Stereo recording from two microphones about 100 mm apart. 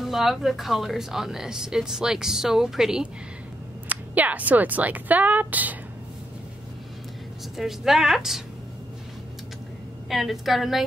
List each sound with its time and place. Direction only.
0.0 s a woman's voice: centre (ahead or behind)
3.9 s speech: 15° right (ahead or behind)
7.5 s a woman's voice: 5° right (ahead or behind)
10.0 s a woman's voice: centre (ahead or behind)